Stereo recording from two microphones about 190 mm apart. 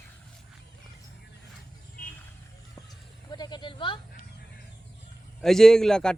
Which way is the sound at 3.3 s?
20° left (ahead or behind).